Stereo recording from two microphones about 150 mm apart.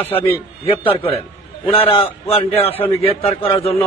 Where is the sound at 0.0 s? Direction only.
15° left (ahead or behind).